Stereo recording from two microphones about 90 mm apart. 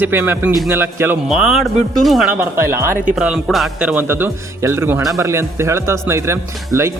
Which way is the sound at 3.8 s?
10° right (ahead or behind).